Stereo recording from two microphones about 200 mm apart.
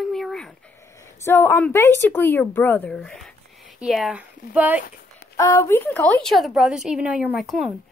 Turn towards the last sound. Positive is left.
turn(degrees=0)  # may be behind; listen again after turning